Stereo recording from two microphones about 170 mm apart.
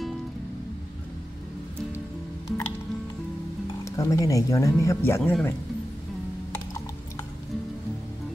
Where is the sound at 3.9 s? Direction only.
20° left (ahead or behind).